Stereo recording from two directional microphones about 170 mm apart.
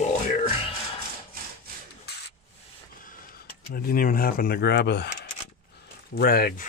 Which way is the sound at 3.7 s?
55° left (ahead or behind).